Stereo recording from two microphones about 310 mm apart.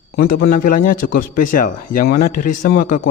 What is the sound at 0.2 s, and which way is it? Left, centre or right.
A man's voice, left.